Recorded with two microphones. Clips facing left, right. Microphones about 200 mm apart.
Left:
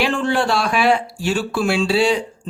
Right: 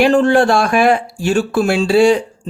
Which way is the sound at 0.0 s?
50° right (ahead or behind).